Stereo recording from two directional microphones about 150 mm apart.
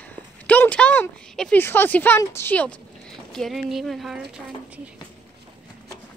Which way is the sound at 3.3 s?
Centre (ahead or behind).